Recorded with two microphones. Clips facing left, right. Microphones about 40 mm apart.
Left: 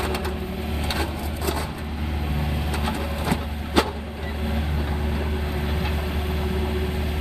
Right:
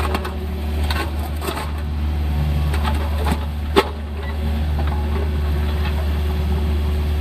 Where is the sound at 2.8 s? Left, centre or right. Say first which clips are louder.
Right 2 dB; centre.